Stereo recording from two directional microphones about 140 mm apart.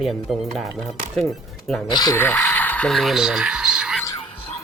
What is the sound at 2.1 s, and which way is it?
Radio, 15° left (ahead or behind).